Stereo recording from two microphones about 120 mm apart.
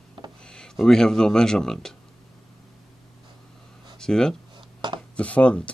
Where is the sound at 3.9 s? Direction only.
5° left (ahead or behind).